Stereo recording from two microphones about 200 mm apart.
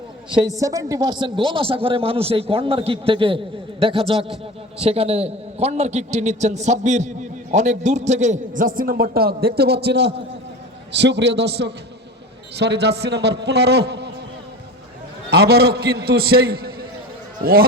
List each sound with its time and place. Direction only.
0.3 s a man's voice: 15° right (ahead or behind); by 14.1 s 55° right (ahead or behind)
15.3 s a man's voice: 50° right (ahead or behind)